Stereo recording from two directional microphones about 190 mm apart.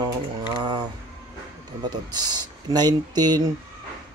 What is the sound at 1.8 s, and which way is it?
Speech, 20° right (ahead or behind).